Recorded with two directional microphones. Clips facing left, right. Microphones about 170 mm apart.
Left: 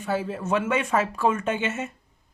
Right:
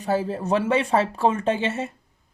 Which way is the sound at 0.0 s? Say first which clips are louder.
Right 3 dB; 35° right (ahead or behind).